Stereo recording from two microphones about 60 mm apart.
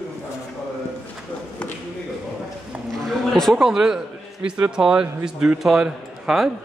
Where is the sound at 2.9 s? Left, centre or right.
Centre.